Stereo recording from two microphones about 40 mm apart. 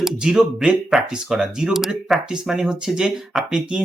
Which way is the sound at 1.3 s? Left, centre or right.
Centre.